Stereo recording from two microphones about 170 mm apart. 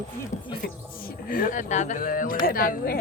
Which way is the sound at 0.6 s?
60° left (ahead or behind).